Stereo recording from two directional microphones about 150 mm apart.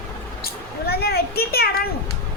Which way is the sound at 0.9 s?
90° left.